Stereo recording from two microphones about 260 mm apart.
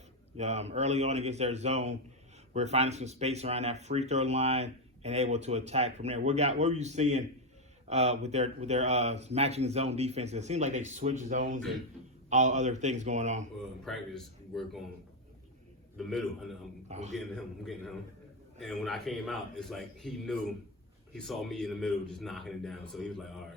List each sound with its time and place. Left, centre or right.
0.3 s speech: right
13.8 s a man's voice: centre
16.0 s a man's voice: centre
16.9 s speech: right
17.3 s a man's voice: centre